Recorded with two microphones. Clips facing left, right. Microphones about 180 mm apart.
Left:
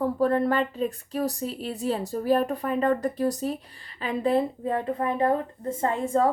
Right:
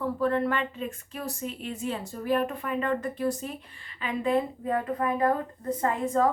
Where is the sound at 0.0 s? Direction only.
40° left (ahead or behind).